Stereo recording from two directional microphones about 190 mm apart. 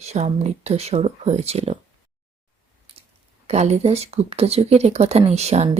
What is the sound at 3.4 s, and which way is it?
Speech, 35° right (ahead or behind).